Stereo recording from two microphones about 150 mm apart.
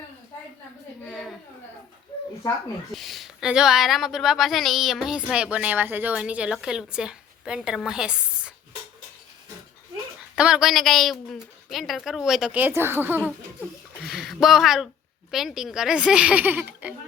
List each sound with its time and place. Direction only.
2.9 s speech: centre (ahead or behind)
10.3 s speech: 5° right (ahead or behind)
14.0 s speech: centre (ahead or behind)